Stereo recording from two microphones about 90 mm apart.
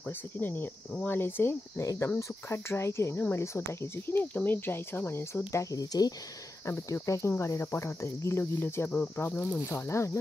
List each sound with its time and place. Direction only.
0.4 s speech: 20° left (ahead or behind)
5.5 s speech: 35° left (ahead or behind)